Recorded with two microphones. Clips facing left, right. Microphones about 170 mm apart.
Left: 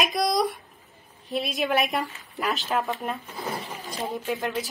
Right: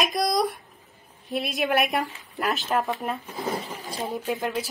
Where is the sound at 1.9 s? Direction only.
Centre (ahead or behind).